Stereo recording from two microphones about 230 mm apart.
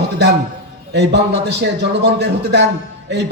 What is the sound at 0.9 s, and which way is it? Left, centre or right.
Speech, right.